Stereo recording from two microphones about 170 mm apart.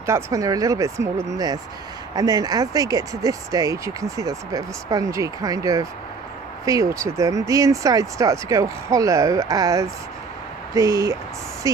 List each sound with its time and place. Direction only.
0.0 s speech: 20° right (ahead or behind)